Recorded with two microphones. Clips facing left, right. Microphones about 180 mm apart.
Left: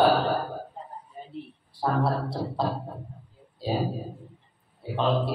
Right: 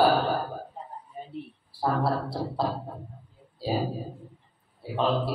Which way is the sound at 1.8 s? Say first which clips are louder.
Even; 5° right (ahead or behind).